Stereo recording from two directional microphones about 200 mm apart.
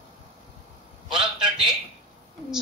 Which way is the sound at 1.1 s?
5° right (ahead or behind).